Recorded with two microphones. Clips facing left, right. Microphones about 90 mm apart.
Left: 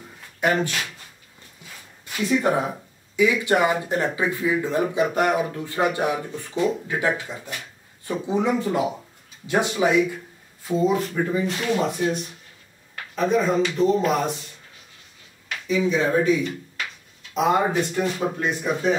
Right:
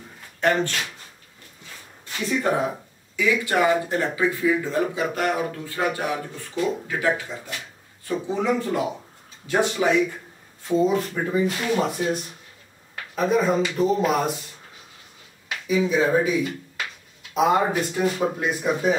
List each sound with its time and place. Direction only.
0.4 s speech: 5° left (ahead or behind)
2.0 s speech: 5° left (ahead or behind)
3.2 s speech: 20° left (ahead or behind)
10.7 s speech: centre (ahead or behind)
15.4 s speech: 5° right (ahead or behind)